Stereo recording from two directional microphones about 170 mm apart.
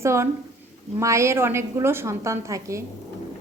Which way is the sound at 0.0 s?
15° right (ahead or behind).